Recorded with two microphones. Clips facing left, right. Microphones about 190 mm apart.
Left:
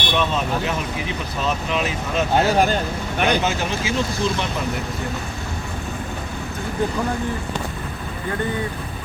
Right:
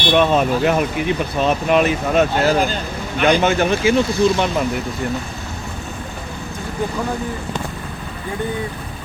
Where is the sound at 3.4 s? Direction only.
60° right (ahead or behind).